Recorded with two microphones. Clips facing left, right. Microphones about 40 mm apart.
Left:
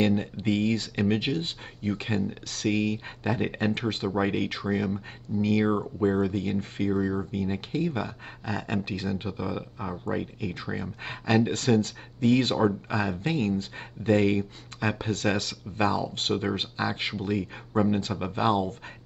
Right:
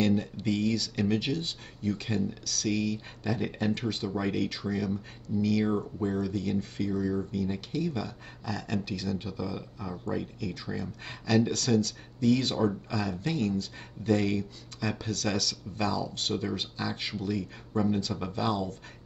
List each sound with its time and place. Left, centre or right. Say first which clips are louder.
0.0 s speech: left 2 dB; left